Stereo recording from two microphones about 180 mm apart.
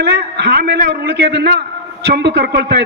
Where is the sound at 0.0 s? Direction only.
65° right (ahead or behind).